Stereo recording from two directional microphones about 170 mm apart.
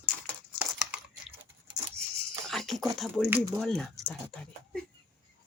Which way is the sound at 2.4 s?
Centre (ahead or behind).